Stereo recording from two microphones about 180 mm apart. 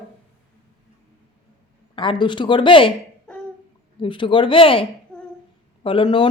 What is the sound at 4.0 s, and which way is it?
Speech, 25° left (ahead or behind).